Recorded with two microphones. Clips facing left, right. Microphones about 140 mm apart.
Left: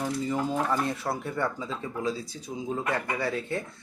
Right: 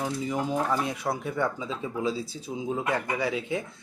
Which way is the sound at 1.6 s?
15° right (ahead or behind).